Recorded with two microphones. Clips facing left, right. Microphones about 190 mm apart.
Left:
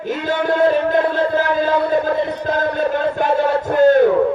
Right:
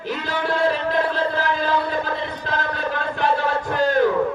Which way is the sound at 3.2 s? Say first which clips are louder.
Left 2 dB; 50° left (ahead or behind).